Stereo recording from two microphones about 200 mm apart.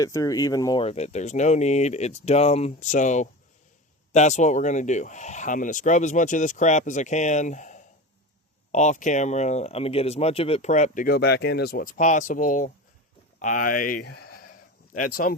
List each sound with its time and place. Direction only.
0.0 s speech: 15° left (ahead or behind); by 15.4 s 45° left (ahead or behind)